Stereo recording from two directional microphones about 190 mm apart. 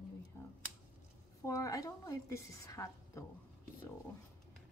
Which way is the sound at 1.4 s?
15° left (ahead or behind).